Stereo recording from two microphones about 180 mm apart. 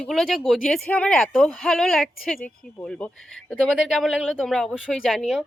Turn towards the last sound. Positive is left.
turn(degrees=0)  # may be behind; listen again after turning